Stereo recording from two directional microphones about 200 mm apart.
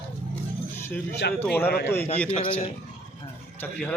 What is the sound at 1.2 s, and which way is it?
Speech, 55° left (ahead or behind).